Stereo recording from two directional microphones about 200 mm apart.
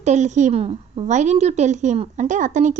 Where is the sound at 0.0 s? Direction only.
35° right (ahead or behind).